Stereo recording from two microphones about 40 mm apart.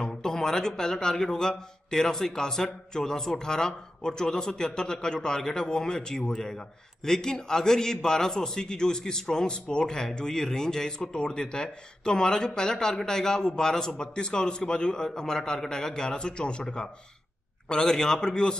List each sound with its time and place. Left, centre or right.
0.0 s a man's voice: centre
17.6 s a man's voice: centre